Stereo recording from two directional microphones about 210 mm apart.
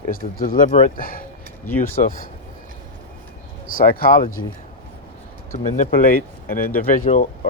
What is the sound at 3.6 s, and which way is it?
Speech, 45° left (ahead or behind).